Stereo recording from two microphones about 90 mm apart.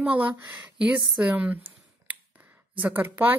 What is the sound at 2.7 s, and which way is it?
Speech, 20° right (ahead or behind).